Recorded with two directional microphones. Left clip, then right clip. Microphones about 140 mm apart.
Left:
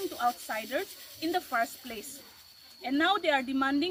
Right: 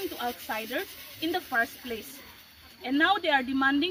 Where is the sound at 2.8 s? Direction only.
15° left (ahead or behind).